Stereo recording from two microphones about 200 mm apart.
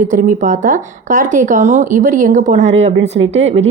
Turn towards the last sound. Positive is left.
turn(degrees=-70)  # may be behind; listen again after turning